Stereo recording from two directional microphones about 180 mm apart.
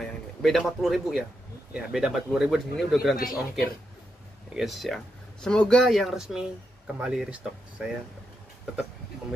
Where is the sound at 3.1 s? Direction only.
55° left (ahead or behind).